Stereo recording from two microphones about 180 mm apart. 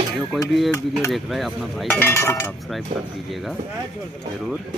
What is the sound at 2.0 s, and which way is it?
Speech, 15° left (ahead or behind).